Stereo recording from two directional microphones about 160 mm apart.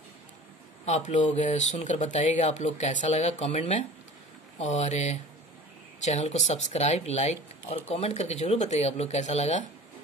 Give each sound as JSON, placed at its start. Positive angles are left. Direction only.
{"t": 0.8, "sound": "speech", "side_deg": 50}